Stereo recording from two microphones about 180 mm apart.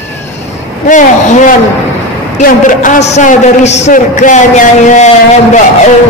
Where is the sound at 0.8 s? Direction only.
40° left (ahead or behind).